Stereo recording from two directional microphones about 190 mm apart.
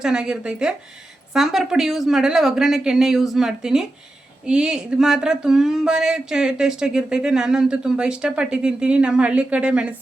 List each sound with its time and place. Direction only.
0.0 s speech: 5° right (ahead or behind)